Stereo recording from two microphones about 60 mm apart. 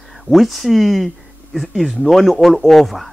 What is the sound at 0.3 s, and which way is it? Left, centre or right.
Speech, centre.